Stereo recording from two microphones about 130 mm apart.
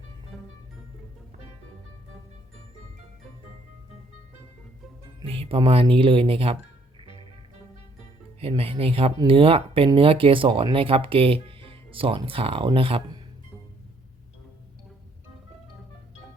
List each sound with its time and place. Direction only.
0.3 s music: centre (ahead or behind)
5.2 s speech: 45° right (ahead or behind)
8.4 s speech: 45° right (ahead or behind)